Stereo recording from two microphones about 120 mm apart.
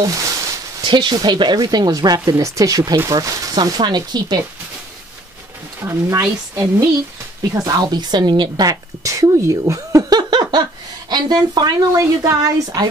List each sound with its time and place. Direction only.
0.0 s a sound: 25° right (ahead or behind)
0.8 s a woman's voice: 40° right (ahead or behind)
5.9 s speech: 20° right (ahead or behind)
7.5 s a woman's voice: 30° right (ahead or behind)